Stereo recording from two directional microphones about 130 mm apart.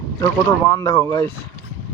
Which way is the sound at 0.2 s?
25° left (ahead or behind).